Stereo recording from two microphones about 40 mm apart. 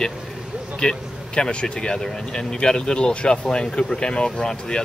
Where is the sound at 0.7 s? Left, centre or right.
Centre.